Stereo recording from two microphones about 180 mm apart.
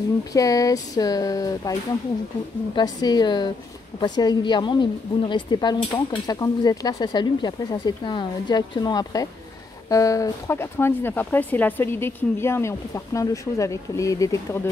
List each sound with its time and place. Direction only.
0.3 s a woman's voice: 20° left (ahead or behind)